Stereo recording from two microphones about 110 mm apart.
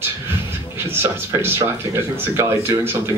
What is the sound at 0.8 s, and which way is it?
A man's voice, 20° right (ahead or behind).